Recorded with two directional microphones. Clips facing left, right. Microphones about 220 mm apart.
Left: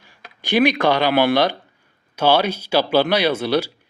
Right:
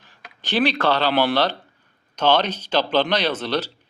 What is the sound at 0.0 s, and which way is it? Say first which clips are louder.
A man's voice: left 2 dB; 10° left (ahead or behind).